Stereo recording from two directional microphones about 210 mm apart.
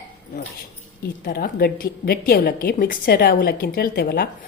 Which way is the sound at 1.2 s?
50° left (ahead or behind).